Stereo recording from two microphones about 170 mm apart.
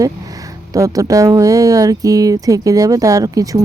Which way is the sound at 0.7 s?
20° right (ahead or behind).